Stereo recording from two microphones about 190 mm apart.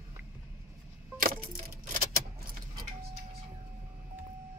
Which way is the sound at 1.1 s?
50° right (ahead or behind).